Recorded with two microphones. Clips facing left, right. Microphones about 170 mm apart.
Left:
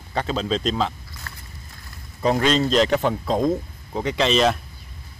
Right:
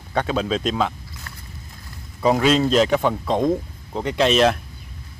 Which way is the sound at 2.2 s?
5° right (ahead or behind).